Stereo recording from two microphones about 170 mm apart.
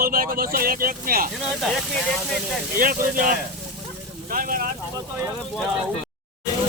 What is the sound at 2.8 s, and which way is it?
Speech, 55° right (ahead or behind).